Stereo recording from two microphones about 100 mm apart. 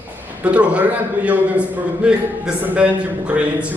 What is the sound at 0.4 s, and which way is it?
A man's voice, 10° right (ahead or behind).